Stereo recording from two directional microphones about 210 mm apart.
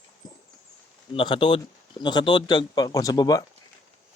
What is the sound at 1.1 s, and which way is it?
Speech, 25° left (ahead or behind).